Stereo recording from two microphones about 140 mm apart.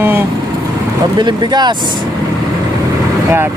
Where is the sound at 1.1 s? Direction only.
30° right (ahead or behind).